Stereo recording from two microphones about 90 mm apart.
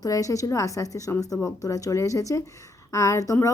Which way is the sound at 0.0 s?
40° left (ahead or behind).